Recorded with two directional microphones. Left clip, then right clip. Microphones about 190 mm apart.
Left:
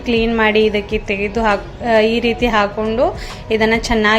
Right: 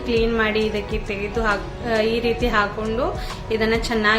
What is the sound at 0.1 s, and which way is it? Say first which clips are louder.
A woman's voice: left 5 dB; 30° left (ahead or behind).